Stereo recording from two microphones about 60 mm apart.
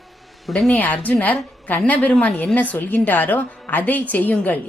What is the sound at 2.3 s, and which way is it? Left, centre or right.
Speech, centre.